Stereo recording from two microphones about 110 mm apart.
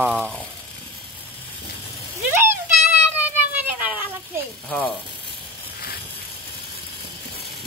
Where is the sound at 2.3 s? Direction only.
20° right (ahead or behind).